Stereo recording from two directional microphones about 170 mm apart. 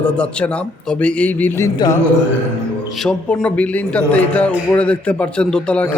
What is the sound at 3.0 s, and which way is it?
A man's voice, 5° left (ahead or behind).